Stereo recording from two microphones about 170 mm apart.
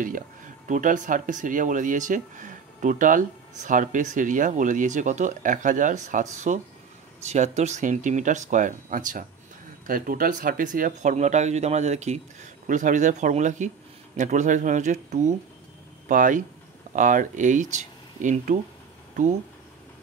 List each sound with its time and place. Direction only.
0.7 s speech: 50° right (ahead or behind)